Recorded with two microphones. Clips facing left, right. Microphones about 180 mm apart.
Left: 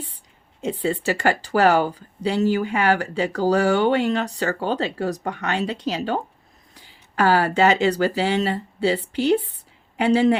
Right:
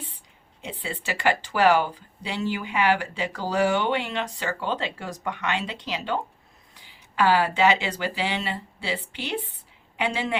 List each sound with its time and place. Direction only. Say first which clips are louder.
0.6 s speech: left 11 dB; 45° left (ahead or behind)